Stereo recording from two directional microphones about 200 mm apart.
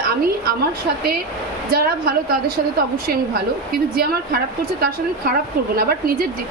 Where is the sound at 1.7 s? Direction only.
50° right (ahead or behind).